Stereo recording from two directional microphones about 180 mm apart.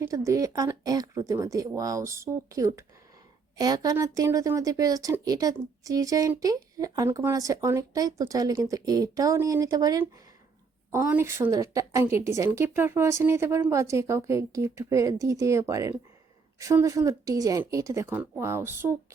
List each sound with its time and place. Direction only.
0.0 s a woman's voice: 15° right (ahead or behind)